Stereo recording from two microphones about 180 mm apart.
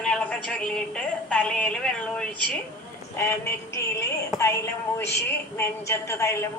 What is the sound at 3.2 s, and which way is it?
A woman's voice, 15° left (ahead or behind).